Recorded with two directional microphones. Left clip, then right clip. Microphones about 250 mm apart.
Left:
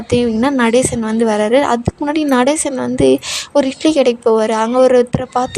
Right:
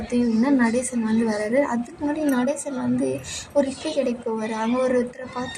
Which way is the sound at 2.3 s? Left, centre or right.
Left.